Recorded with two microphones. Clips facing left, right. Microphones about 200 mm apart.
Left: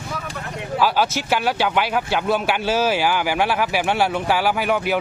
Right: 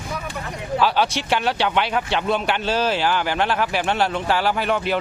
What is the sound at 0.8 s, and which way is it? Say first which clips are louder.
Speech: left 1 dB; 5° left (ahead or behind).